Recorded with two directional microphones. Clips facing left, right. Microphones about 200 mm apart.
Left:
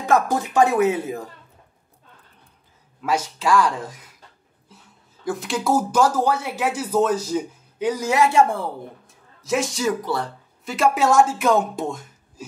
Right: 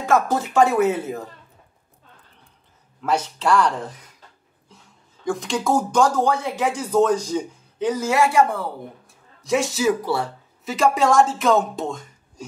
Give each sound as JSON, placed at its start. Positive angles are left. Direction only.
{"t": 0.0, "sound": "speech", "side_deg": 15}
{"t": 3.0, "sound": "speech", "side_deg": 10}
{"t": 5.2, "sound": "speech", "side_deg": 5}
{"t": 9.4, "sound": "speech", "side_deg": 0}